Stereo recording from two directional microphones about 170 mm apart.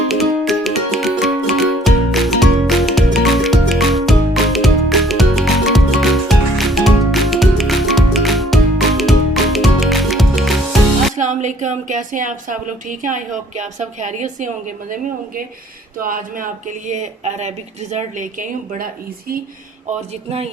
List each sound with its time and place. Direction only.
0.1 s music: centre (ahead or behind)
11.2 s speech: 45° right (ahead or behind)
16.0 s speech: 55° right (ahead or behind)